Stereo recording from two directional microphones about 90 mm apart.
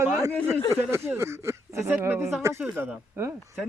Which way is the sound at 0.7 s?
30° right (ahead or behind).